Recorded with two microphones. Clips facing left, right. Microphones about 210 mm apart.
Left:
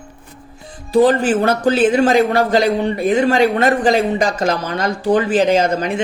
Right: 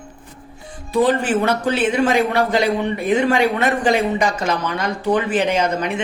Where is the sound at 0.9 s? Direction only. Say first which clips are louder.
Left 4 dB; 35° left (ahead or behind).